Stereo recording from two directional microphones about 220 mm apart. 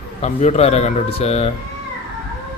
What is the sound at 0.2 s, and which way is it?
Speech, 30° left (ahead or behind).